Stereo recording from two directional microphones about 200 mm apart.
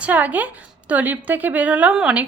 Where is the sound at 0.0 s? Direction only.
10° right (ahead or behind).